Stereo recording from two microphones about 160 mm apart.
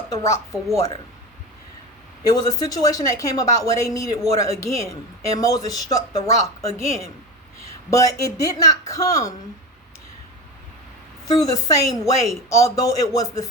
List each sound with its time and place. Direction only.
0.1 s a woman's voice: 20° left (ahead or behind)
2.2 s a woman's voice: 25° left (ahead or behind)
11.3 s a woman's voice: 20° left (ahead or behind)